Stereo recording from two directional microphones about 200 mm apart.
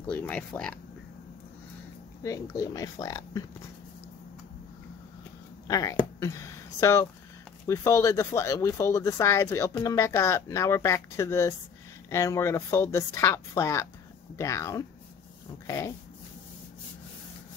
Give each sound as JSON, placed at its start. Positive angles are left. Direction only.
{"t": 0.0, "sound": "speech", "side_deg": 5}
{"t": 2.2, "sound": "speech", "side_deg": 15}
{"t": 5.7, "sound": "speech", "side_deg": 20}
{"t": 15.6, "sound": "dog", "side_deg": 15}